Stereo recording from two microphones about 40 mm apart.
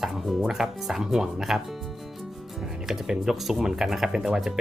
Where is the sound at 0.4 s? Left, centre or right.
Centre.